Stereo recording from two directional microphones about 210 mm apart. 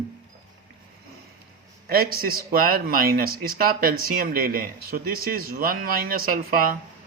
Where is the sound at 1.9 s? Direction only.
45° right (ahead or behind).